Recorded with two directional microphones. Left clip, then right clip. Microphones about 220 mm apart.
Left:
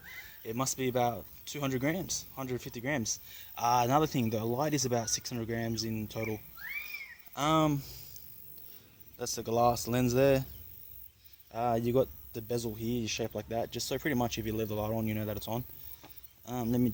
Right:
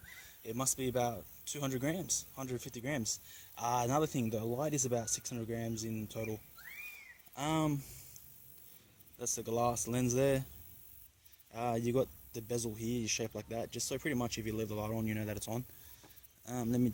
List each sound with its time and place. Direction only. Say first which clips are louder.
0.4 s speech: left 4 dB; 15° right (ahead or behind)
9.1 s speech: left 5 dB; 5° right (ahead or behind)
11.5 s speech: left 5 dB; 15° right (ahead or behind)